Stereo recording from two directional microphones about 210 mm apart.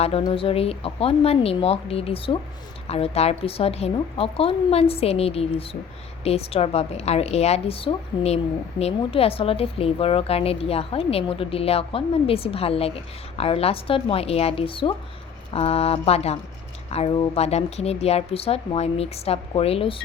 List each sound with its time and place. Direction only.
0.0 s a woman's voice: 25° left (ahead or behind)